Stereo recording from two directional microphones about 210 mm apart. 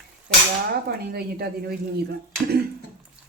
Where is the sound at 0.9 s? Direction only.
50° right (ahead or behind).